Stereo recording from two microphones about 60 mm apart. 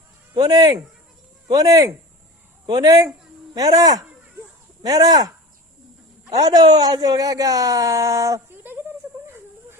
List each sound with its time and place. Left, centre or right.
0.4 s speech: right
6.3 s speech: right
8.4 s a sound: right
9.2 s wheeze: right